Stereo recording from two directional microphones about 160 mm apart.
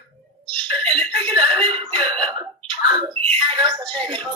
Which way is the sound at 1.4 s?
30° right (ahead or behind).